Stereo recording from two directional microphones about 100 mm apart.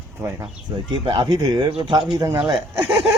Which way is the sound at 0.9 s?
50° right (ahead or behind).